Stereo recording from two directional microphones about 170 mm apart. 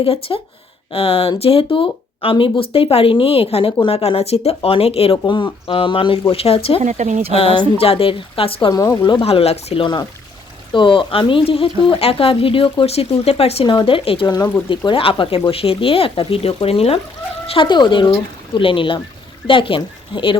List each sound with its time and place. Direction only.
0.0 s speech: 35° left (ahead or behind)
6.7 s speech: 45° right (ahead or behind)
7.3 s speech: 35° left (ahead or behind)
8.7 s speech: 20° left (ahead or behind)
9.0 s speech: 30° left (ahead or behind)